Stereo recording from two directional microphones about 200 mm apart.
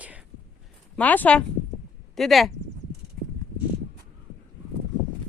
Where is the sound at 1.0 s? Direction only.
10° left (ahead or behind).